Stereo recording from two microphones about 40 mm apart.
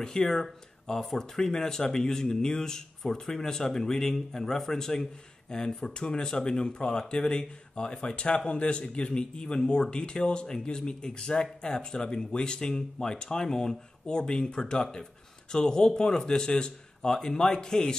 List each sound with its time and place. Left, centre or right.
0.0 s speech: centre